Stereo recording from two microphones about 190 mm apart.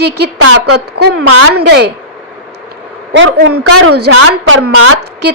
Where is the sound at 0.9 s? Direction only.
60° right (ahead or behind).